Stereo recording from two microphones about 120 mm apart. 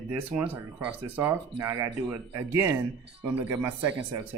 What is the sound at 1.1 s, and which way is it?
Speech, 20° right (ahead or behind).